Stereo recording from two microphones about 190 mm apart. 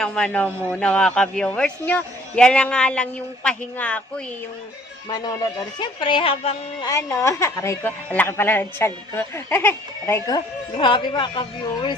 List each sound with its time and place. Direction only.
0.0 s a man's voice: 5° left (ahead or behind)
5.0 s speech: 20° left (ahead or behind)
6.8 s a woman's voice: 15° left (ahead or behind)